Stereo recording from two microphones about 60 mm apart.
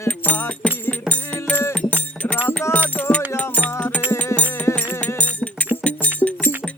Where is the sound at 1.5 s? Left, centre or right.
Left.